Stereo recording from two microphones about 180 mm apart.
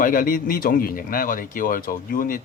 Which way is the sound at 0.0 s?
50° left (ahead or behind).